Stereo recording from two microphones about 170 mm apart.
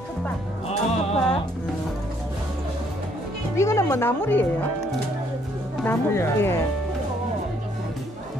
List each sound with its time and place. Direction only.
0.7 s music: 35° left (ahead or behind)
3.5 s speech: 15° left (ahead or behind)
5.9 s speech: 15° left (ahead or behind)